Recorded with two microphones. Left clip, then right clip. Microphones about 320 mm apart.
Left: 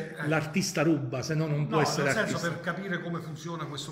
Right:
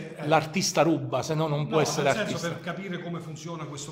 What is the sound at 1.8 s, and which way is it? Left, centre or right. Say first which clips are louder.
A man's voice: right 2 dB; centre.